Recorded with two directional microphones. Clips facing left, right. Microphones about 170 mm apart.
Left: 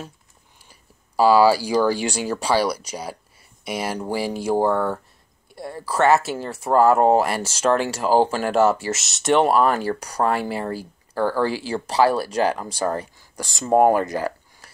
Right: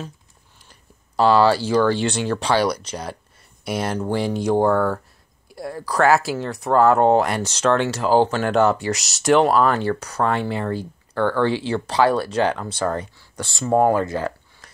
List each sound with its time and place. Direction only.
0.7 s speech: 5° left (ahead or behind)
11.1 s speech: 35° left (ahead or behind)
11.8 s speech: 5° left (ahead or behind)